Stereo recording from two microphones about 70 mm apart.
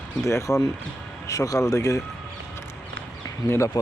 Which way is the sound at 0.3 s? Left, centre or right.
Left.